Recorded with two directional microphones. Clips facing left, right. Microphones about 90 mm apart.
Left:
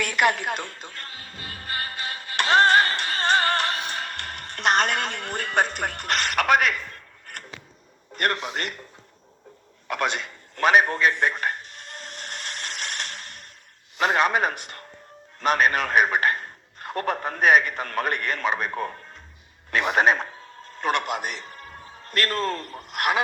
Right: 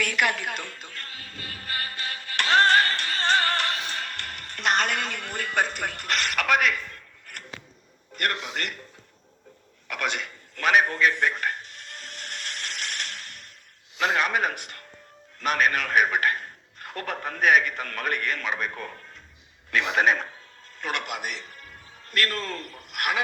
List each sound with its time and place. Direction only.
0.0 s music: 25° left (ahead or behind)
6.0 s a man's voice: 25° left (ahead or behind)
8.1 s a man's voice: 30° left (ahead or behind)
9.9 s a sound: 30° left (ahead or behind)
14.0 s a man's voice: 30° left (ahead or behind)